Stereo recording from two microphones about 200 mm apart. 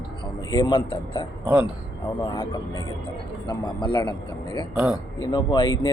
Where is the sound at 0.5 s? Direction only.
25° left (ahead or behind).